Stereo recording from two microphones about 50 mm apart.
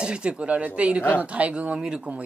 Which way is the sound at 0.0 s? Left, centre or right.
Centre.